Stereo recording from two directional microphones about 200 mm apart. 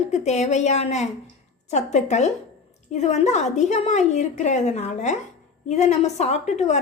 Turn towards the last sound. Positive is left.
turn(degrees=35)  # may be behind; listen again after turning